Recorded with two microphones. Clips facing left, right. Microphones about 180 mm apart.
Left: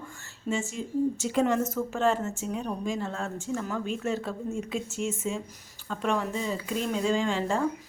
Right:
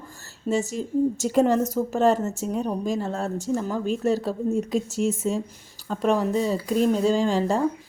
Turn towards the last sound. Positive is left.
turn(degrees=-35)  # may be behind; listen again after turning